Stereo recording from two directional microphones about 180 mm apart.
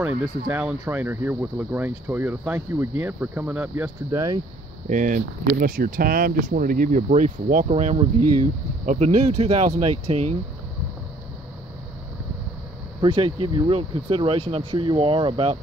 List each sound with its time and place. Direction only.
0.0 s speech: 10° right (ahead or behind)
4.1 s speech: 20° right (ahead or behind)
4.8 s speech: 45° right (ahead or behind)
13.0 s speech: 30° right (ahead or behind)